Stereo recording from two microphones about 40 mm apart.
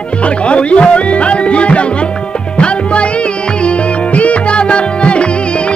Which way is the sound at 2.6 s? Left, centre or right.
Left.